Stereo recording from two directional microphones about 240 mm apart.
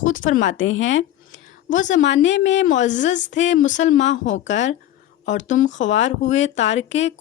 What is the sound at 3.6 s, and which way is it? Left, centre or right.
A woman's voice, left.